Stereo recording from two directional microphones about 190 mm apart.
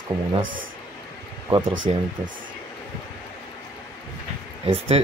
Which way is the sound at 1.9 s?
30° right (ahead or behind).